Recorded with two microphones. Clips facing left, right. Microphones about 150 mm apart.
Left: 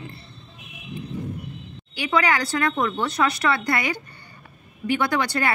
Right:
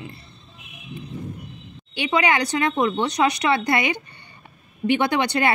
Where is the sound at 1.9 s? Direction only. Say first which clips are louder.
Right 1 dB; 25° right (ahead or behind).